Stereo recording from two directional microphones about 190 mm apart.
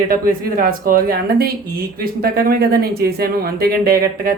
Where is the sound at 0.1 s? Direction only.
50° right (ahead or behind).